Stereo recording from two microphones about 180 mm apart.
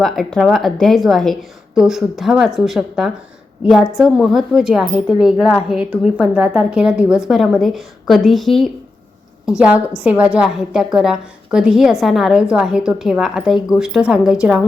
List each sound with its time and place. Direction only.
0.0 s a woman's voice: centre (ahead or behind)